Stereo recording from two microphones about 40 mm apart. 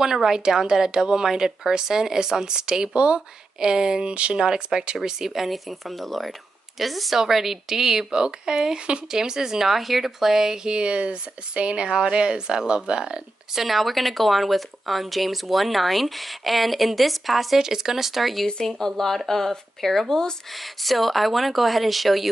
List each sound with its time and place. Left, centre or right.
0.0 s speech: centre
13.6 s speech: centre
20.5 s speech: centre